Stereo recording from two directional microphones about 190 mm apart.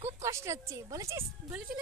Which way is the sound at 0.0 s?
15° right (ahead or behind).